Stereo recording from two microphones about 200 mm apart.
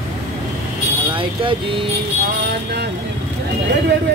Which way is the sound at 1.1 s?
25° right (ahead or behind).